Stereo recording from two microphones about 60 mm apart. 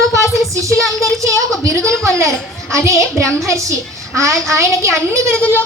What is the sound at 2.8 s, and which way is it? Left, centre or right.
A child's voice, right.